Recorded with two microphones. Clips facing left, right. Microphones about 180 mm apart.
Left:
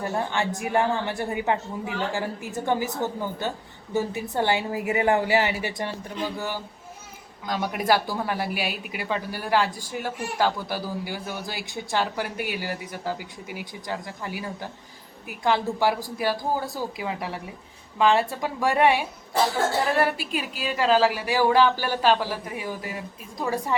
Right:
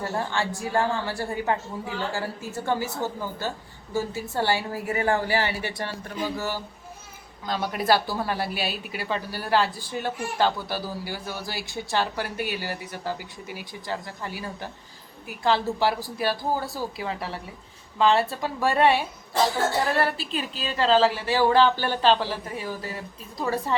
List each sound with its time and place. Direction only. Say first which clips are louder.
0.0 s a woman's voice: left 1 dB; 20° left (ahead or behind)